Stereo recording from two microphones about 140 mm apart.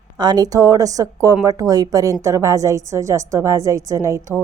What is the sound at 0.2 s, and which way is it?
A woman's voice, 30° right (ahead or behind).